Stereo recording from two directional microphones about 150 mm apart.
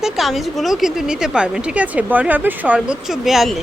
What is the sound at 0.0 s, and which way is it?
A woman's voice, centre (ahead or behind).